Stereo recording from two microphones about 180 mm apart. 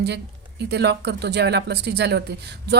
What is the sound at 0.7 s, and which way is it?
A woman's voice, 70° right (ahead or behind).